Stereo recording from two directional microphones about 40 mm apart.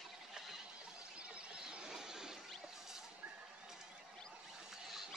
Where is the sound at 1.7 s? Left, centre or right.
Centre.